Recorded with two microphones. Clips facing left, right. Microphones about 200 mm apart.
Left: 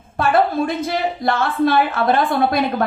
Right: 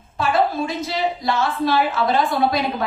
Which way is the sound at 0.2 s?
55° left (ahead or behind).